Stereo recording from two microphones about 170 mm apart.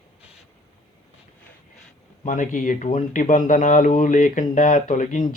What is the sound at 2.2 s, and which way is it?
Speech, 50° left (ahead or behind).